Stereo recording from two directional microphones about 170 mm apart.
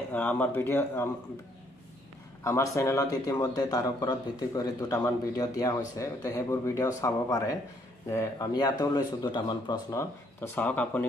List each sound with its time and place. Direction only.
0.1 s speech: 10° left (ahead or behind)
2.4 s speech: 15° left (ahead or behind)